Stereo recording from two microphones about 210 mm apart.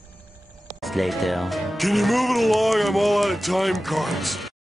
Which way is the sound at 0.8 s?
Centre (ahead or behind).